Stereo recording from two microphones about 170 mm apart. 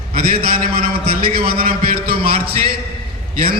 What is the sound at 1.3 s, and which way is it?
A man's voice, 60° right (ahead or behind).